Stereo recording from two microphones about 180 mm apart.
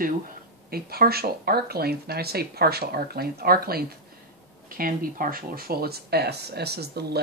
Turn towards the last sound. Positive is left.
turn(degrees=-65)  # may be behind; listen again after turning